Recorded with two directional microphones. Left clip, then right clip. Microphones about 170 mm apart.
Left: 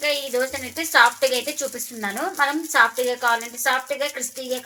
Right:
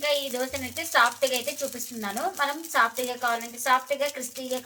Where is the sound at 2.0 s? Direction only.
55° left (ahead or behind).